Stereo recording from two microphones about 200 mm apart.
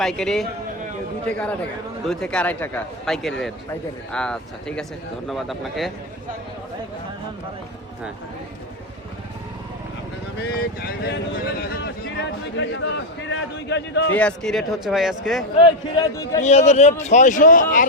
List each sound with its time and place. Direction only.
0.0 s a man's voice: centre (ahead or behind)
10.4 s speech: 50° left (ahead or behind)
14.2 s a man's voice: 5° left (ahead or behind)
15.6 s a man's voice: 15° left (ahead or behind)
16.4 s speech: 35° left (ahead or behind)